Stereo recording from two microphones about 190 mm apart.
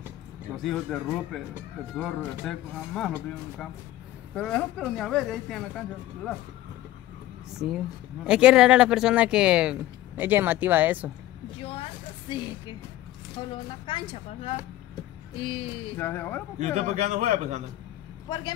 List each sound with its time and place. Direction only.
0.6 s speech: centre (ahead or behind)
4.3 s speech: 5° left (ahead or behind)
7.5 s speech: centre (ahead or behind)
11.6 s a sound: 30° left (ahead or behind)
13.4 s a woman's voice: 25° left (ahead or behind)
15.0 s a sound: 30° left (ahead or behind)
16.0 s speech: 10° left (ahead or behind)
16.5 s a man's voice: 40° right (ahead or behind)
18.3 s a woman's voice: 25° left (ahead or behind)